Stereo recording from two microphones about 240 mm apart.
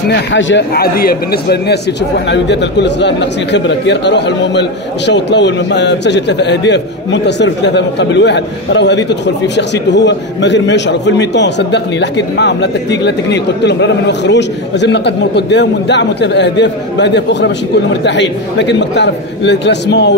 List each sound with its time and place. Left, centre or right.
0.1 s a man's voice: left